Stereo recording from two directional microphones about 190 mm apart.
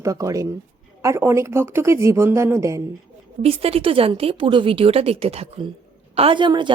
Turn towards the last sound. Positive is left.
turn(degrees=-25)  # may be behind; listen again after turning